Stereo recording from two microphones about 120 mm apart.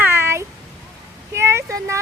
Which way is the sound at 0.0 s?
20° right (ahead or behind).